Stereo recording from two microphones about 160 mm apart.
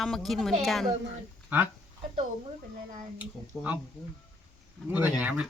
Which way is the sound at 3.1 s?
10° right (ahead or behind).